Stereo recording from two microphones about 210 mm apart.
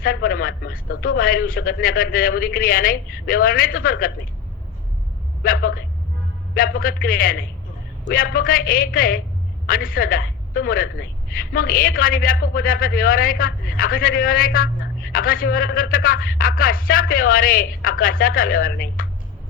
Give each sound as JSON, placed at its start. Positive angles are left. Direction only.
{"t": 0.0, "sound": "a man's voice", "side_deg": 45}
{"t": 5.4, "sound": "a woman's voice", "side_deg": 45}